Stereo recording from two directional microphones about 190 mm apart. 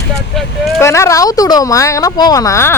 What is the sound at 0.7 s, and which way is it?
Speech, 15° left (ahead or behind).